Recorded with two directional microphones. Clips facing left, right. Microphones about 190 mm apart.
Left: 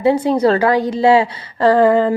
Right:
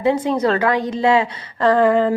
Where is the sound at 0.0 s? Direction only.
35° left (ahead or behind).